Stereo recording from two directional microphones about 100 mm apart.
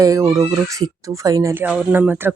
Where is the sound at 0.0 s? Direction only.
30° right (ahead or behind).